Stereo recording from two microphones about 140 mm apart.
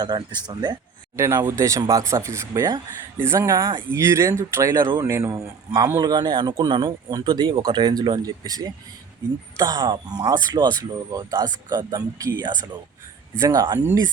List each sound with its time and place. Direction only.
0.0 s speech: 30° right (ahead or behind)
1.1 s speech: 20° right (ahead or behind)